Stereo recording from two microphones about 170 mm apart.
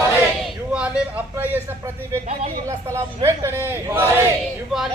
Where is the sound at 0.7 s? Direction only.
5° right (ahead or behind).